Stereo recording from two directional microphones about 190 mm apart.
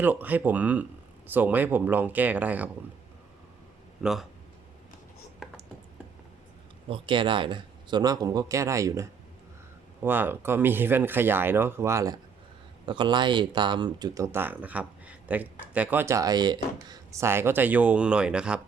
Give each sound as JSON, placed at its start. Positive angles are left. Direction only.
{"t": 0.0, "sound": "speech", "side_deg": -10}
{"t": 4.0, "sound": "speech", "side_deg": 0}
{"t": 6.9, "sound": "speech", "side_deg": -25}